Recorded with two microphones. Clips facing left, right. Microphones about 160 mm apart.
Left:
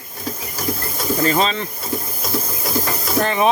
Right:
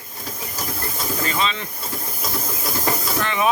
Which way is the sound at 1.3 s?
40° left (ahead or behind).